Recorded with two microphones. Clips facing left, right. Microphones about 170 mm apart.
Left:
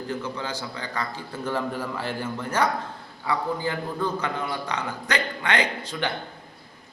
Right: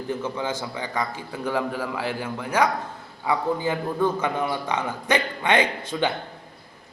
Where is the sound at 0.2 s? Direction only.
20° right (ahead or behind).